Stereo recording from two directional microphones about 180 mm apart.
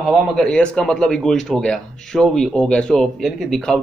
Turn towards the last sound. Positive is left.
turn(degrees=0)  # may be behind; listen again after turning